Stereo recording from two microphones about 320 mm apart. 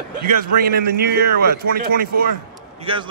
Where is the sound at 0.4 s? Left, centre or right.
Right.